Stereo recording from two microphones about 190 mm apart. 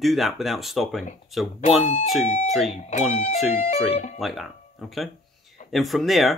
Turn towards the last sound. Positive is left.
turn(degrees=0)  # may be behind; listen again after turning